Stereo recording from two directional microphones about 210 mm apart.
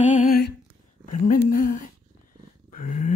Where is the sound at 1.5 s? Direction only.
40° left (ahead or behind).